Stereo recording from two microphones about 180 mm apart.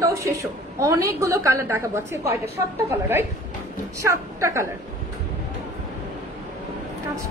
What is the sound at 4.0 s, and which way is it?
Speech, 15° right (ahead or behind).